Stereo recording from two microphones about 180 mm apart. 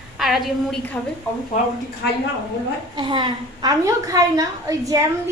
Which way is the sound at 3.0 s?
25° right (ahead or behind).